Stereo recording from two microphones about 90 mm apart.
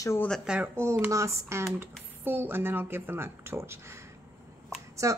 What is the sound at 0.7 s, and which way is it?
Speech, 30° right (ahead or behind).